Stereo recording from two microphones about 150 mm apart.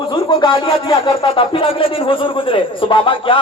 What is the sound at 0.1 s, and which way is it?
Speech, 35° left (ahead or behind).